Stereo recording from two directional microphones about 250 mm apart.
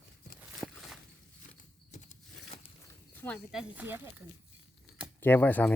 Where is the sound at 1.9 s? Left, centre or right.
Left.